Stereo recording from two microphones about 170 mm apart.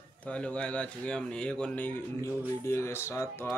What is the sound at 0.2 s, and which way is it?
Speech, 5° left (ahead or behind).